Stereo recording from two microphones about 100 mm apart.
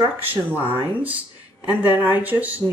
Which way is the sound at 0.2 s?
20° right (ahead or behind).